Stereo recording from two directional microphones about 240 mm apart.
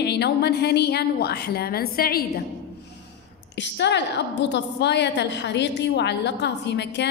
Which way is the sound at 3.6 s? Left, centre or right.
Left.